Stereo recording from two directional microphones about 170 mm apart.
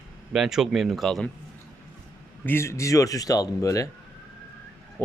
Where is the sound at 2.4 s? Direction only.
15° left (ahead or behind).